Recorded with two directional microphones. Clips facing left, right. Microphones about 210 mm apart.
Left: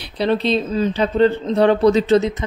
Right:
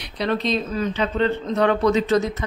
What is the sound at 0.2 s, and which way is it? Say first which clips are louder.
Speech: left 4 dB; 30° left (ahead or behind).